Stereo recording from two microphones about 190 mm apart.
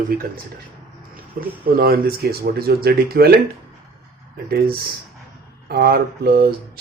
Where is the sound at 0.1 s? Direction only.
50° right (ahead or behind).